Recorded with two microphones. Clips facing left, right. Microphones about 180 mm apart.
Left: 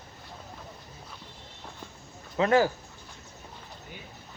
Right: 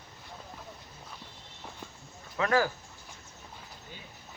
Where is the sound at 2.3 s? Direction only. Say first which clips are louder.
Left 5 dB; 25° left (ahead or behind).